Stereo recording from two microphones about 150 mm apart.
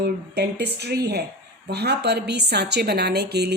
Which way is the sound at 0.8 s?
90° right.